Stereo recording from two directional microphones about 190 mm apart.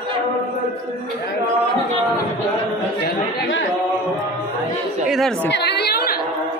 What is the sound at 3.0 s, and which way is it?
Speech, 70° left (ahead or behind).